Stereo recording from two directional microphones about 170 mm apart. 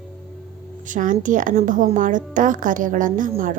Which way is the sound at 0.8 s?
50° right (ahead or behind).